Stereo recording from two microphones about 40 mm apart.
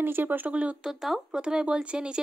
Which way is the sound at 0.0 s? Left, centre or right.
Right.